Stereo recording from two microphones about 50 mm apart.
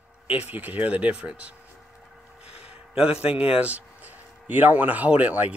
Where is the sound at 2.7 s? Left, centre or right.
Right.